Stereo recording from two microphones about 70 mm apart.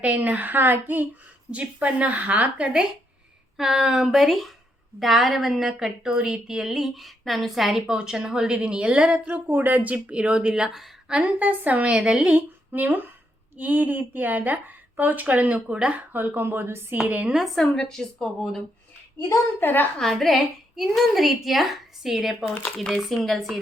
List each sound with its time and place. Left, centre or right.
0.0 s a woman's voice: centre
3.6 s a woman's voice: centre
11.1 s a woman's voice: right
17.3 s a woman's voice: centre
19.5 s a woman's voice: left
20.0 s a woman's voice: centre